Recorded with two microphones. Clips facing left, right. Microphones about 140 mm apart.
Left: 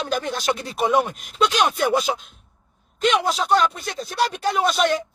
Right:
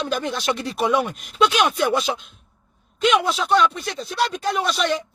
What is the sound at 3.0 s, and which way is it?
Speech, 40° left (ahead or behind).